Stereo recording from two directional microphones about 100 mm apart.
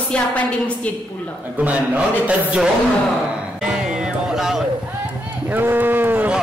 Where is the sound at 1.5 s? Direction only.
15° right (ahead or behind).